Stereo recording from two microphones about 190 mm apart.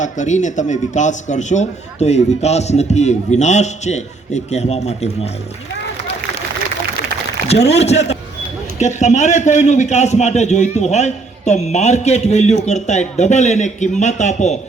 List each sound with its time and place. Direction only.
0.0 s a man's voice: 40° left (ahead or behind)
7.7 s a man's voice: 35° left (ahead or behind)